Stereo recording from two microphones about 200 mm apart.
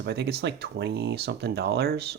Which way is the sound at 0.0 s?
55° right (ahead or behind).